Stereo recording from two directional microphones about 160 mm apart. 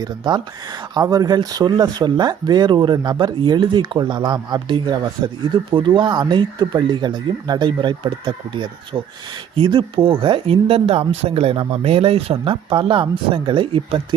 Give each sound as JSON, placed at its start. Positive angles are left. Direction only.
{"t": 0.0, "sound": "speech", "side_deg": -25}